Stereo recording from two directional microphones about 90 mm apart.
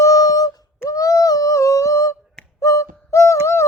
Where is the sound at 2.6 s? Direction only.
35° left (ahead or behind).